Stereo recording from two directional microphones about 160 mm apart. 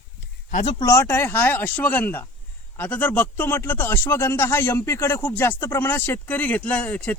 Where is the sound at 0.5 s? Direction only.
40° left (ahead or behind).